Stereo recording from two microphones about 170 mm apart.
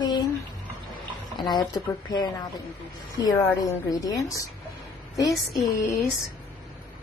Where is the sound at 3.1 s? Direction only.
20° left (ahead or behind).